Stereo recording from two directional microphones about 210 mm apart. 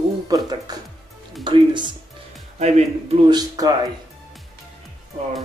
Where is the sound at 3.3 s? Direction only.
20° right (ahead or behind).